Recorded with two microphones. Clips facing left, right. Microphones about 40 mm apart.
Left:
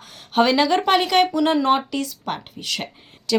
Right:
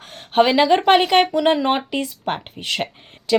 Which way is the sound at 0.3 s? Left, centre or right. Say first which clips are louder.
Right 3 dB; right.